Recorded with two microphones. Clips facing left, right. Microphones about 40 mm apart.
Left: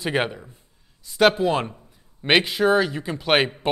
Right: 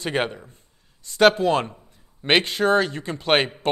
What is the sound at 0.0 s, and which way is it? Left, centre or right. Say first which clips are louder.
Speech: left 1 dB; centre.